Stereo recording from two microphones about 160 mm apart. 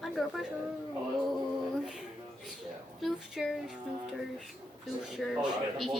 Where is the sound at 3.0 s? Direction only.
Centre (ahead or behind).